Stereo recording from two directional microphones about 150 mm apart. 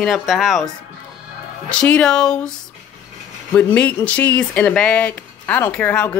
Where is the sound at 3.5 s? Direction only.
10° left (ahead or behind).